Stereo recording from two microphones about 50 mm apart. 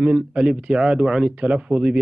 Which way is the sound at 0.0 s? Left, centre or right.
Right.